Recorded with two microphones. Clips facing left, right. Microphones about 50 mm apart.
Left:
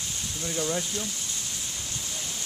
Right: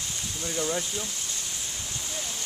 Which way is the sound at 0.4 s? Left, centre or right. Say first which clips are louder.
Even; centre.